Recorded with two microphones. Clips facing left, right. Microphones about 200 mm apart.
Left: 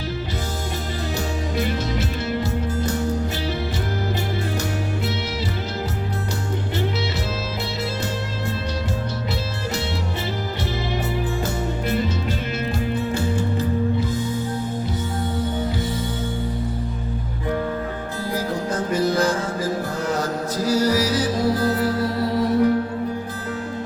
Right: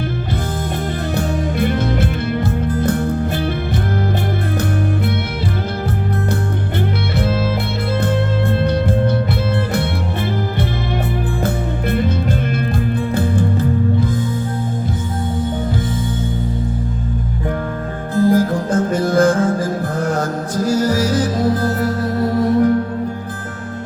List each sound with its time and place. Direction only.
1.1 s music: 55° right (ahead or behind)
8.0 s music: 55° right (ahead or behind)
11.4 s music: 55° right (ahead or behind)
13.1 s music: 55° right (ahead or behind)
18.2 s music: 50° right (ahead or behind)